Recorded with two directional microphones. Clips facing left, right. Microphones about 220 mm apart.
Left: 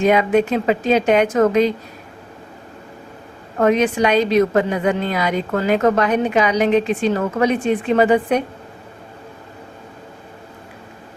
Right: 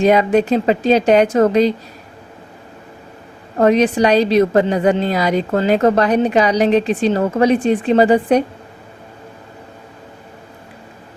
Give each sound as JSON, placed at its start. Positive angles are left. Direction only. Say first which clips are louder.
{"t": 0.0, "sound": "a woman's voice", "louder": "right 2 dB", "side_deg": -35}
{"t": 3.6, "sound": "a woman's voice", "louder": "right 3 dB", "side_deg": -35}